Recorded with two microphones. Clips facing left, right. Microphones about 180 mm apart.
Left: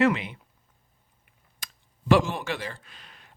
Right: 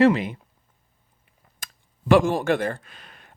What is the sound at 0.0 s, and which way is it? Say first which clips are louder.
Speech: right 5 dB; 40° right (ahead or behind).